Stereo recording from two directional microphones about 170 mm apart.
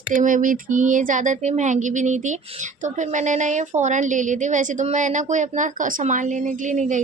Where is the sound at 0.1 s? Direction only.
50° right (ahead or behind).